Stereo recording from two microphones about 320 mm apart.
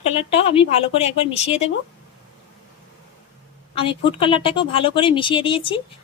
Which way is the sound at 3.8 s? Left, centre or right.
Centre.